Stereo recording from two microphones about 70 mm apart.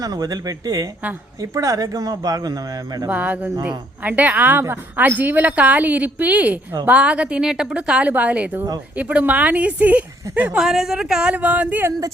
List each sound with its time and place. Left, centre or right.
0.0 s a man's voice: right
3.1 s a woman's voice: right
10.6 s a woman's voice: centre; by 11.9 s right